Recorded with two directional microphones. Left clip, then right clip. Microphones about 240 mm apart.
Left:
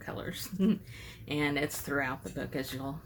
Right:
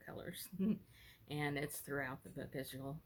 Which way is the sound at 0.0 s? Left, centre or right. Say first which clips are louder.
Left 11 dB; right.